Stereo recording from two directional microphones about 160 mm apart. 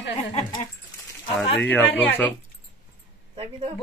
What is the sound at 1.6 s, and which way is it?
Speech, 10° left (ahead or behind).